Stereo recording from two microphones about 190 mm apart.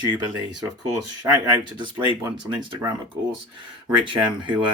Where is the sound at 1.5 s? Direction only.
25° right (ahead or behind).